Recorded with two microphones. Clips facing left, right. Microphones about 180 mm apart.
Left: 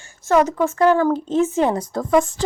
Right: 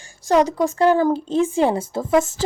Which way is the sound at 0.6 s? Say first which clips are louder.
Even; 30° right (ahead or behind).